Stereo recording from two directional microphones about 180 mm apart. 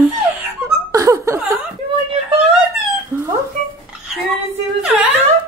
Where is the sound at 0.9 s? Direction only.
15° right (ahead or behind).